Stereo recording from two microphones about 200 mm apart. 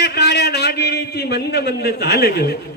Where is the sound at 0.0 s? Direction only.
55° left (ahead or behind).